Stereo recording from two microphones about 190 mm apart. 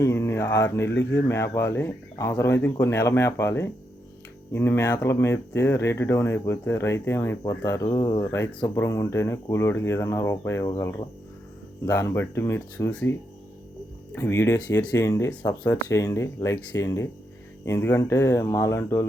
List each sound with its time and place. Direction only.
0.0 s speech: 15° left (ahead or behind)
14.2 s speech: 15° left (ahead or behind)